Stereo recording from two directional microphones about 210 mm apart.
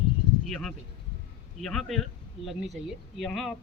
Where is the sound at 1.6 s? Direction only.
Centre (ahead or behind).